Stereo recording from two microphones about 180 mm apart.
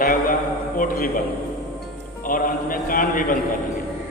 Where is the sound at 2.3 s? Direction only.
50° left (ahead or behind).